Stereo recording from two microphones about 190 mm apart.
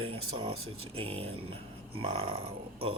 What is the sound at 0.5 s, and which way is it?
Speech, 90° right.